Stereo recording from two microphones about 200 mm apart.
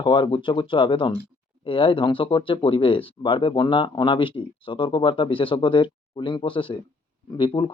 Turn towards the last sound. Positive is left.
turn(degrees=25)  # may be behind; listen again after turning